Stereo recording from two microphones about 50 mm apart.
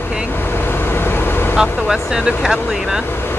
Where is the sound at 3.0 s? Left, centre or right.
Left.